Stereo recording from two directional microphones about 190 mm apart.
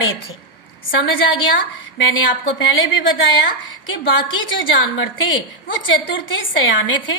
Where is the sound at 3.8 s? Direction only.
85° left.